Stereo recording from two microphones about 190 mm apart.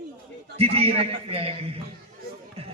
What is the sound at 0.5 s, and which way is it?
A man's voice, 30° right (ahead or behind).